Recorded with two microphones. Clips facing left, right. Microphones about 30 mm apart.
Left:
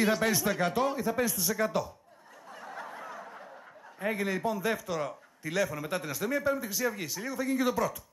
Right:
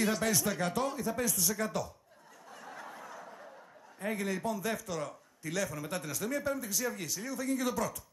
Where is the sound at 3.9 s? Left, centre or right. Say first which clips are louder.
Left 4 dB; centre.